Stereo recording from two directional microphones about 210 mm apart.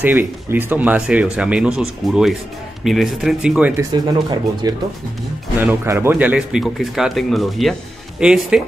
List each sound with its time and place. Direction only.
0.0 s speech: 10° right (ahead or behind)
3.9 s speech: 20° right (ahead or behind)